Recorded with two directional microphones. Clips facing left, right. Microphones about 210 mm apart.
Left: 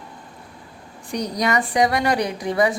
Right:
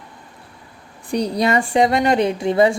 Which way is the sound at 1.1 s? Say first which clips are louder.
Right 4 dB; 30° right (ahead or behind).